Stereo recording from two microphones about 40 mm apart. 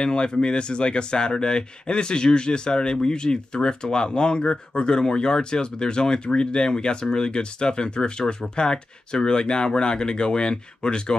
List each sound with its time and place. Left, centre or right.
0.0 s speech: left